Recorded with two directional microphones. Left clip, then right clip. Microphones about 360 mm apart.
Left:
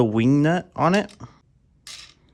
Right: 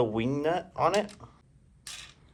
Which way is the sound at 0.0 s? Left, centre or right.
Left.